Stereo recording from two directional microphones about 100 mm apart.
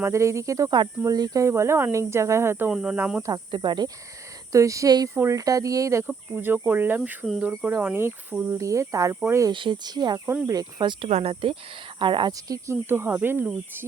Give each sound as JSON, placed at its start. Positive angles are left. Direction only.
{"t": 0.0, "sound": "cricket", "side_deg": -30}
{"t": 0.8, "sound": "speech", "side_deg": -40}
{"t": 3.2, "sound": "cricket", "side_deg": -45}
{"t": 4.5, "sound": "cricket", "side_deg": -30}
{"t": 5.1, "sound": "speech", "side_deg": -30}
{"t": 9.5, "sound": "cricket", "side_deg": -50}
{"t": 11.1, "sound": "speech", "side_deg": -85}
{"t": 11.9, "sound": "speech", "side_deg": -55}
{"t": 12.5, "sound": "speech", "side_deg": -30}